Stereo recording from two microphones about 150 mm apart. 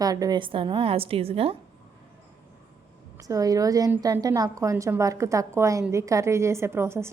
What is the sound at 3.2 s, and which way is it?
A woman's voice, 20° right (ahead or behind).